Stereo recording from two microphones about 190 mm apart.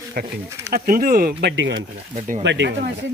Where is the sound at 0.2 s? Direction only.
50° right (ahead or behind).